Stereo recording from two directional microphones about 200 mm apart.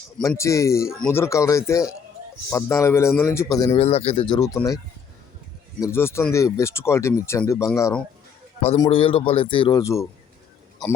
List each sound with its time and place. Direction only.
0.2 s speech: 15° left (ahead or behind)
3.8 s speech: 30° left (ahead or behind)
5.8 s speech: 10° left (ahead or behind)
8.8 s speech: 30° left (ahead or behind)
9.8 s speech: 15° left (ahead or behind)